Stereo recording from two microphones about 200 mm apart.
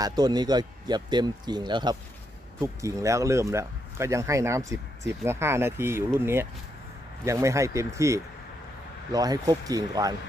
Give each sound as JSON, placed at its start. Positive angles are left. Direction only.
{"t": 0.0, "sound": "speech", "side_deg": -20}